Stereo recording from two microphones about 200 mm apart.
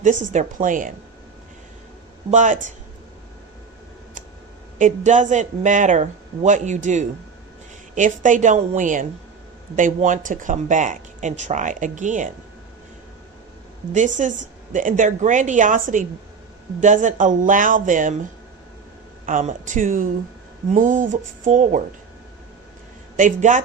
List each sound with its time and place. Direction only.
0.3 s speech: 40° right (ahead or behind)
2.3 s speech: 40° right (ahead or behind)
4.8 s speech: 40° right (ahead or behind)
13.9 s speech: 40° right (ahead or behind)
19.2 s speech: 40° right (ahead or behind)
23.1 s speech: 40° right (ahead or behind)